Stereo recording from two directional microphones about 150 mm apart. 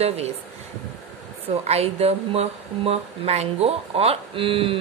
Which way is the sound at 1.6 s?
45° right (ahead or behind).